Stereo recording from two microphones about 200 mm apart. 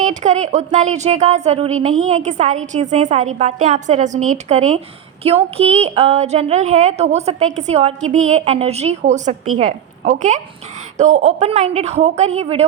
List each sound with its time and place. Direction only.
0.0 s a woman's voice: 35° right (ahead or behind)